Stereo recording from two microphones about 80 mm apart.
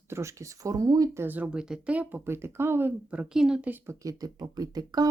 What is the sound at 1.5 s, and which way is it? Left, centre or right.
Speech, centre.